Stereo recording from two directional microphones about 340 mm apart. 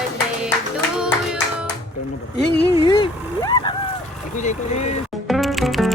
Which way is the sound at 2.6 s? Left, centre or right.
Centre.